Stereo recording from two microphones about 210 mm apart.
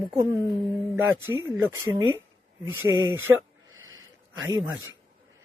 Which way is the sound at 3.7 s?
70° right (ahead or behind).